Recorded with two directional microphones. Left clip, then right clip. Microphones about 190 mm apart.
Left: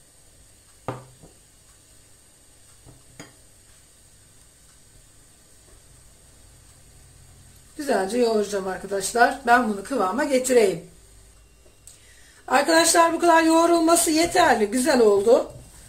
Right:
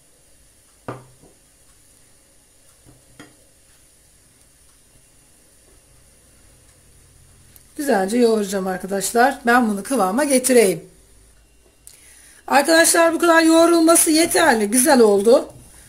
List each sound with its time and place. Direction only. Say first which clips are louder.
7.7 s speech: right 4 dB; 50° right (ahead or behind)
12.4 s speech: right 4 dB; 60° right (ahead or behind)